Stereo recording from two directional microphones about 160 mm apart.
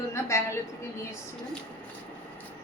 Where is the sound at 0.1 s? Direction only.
15° left (ahead or behind).